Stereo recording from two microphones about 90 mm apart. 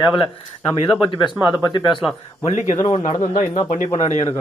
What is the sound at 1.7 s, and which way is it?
Speech, 55° left (ahead or behind).